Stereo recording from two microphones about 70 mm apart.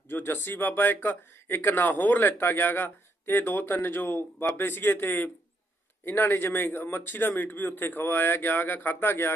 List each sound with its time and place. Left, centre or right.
0.1 s speech: left